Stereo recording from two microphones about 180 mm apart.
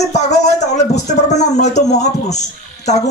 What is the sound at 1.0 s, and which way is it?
A man's voice, 40° left (ahead or behind).